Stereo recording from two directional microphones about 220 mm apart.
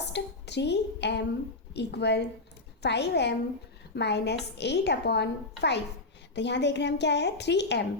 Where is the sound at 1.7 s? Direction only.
50° left (ahead or behind).